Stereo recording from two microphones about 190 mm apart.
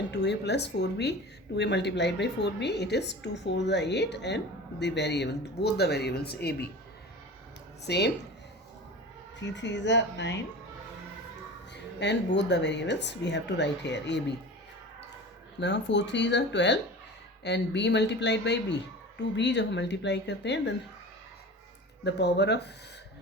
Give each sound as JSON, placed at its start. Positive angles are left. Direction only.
{"t": 0.1, "sound": "a woman's voice", "side_deg": 65}
{"t": 7.9, "sound": "a woman's voice", "side_deg": 60}
{"t": 9.4, "sound": "speech", "side_deg": 70}
{"t": 11.7, "sound": "a woman's voice", "side_deg": 65}
{"t": 15.6, "sound": "a woman's voice", "side_deg": 65}
{"t": 22.0, "sound": "a woman's voice", "side_deg": 60}